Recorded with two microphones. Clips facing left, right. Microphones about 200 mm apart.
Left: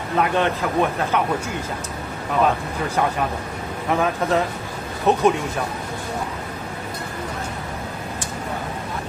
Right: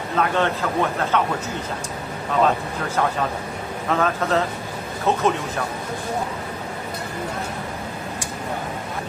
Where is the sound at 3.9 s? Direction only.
15° left (ahead or behind).